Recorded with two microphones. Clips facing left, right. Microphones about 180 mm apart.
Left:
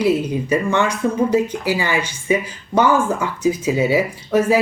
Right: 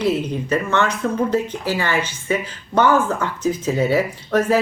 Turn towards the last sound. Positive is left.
turn(degrees=10)  # may be behind; listen again after turning